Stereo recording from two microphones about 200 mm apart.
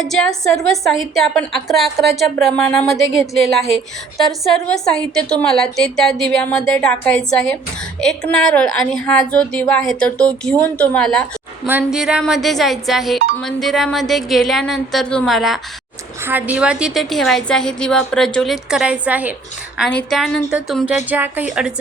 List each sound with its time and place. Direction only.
0.0 s speech: centre (ahead or behind)
11.6 s speech: 10° right (ahead or behind)
19.8 s speech: 5° left (ahead or behind)